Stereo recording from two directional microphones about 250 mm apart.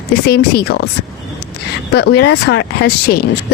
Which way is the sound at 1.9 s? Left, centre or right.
Left.